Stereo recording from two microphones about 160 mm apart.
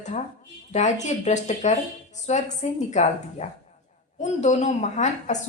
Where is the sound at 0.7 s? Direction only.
45° left (ahead or behind).